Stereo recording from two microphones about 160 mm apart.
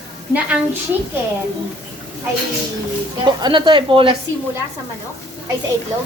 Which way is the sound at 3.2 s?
30° right (ahead or behind).